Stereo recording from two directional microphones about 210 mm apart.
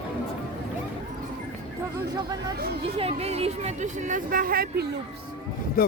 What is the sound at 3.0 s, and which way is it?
Speech, 30° right (ahead or behind).